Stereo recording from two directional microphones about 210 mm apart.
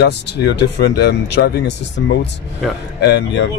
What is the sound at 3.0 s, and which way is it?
Speech, 55° left (ahead or behind).